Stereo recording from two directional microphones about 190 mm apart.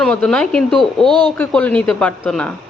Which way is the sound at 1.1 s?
25° right (ahead or behind).